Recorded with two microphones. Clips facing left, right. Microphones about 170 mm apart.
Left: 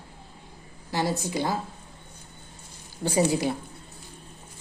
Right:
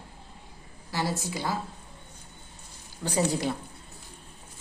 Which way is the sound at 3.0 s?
25° left (ahead or behind).